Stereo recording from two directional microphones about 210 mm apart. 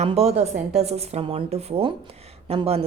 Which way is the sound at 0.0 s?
30° right (ahead or behind).